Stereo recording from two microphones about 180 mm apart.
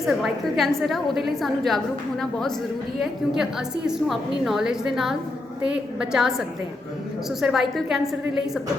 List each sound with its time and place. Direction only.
0.0 s a woman's voice: centre (ahead or behind)
3.0 s a woman's voice: 5° right (ahead or behind)
7.4 s a woman's voice: centre (ahead or behind)